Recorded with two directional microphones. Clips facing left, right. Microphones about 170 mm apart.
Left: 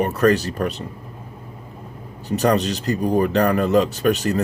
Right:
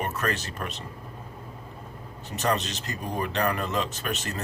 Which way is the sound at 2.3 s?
35° left (ahead or behind).